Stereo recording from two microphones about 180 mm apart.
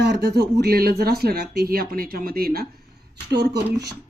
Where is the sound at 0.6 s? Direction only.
60° right (ahead or behind).